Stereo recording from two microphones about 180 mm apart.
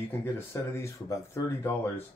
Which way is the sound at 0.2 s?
15° left (ahead or behind).